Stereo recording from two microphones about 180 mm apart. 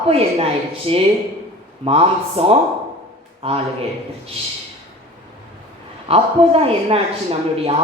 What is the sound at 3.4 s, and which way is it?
Speech, 35° right (ahead or behind).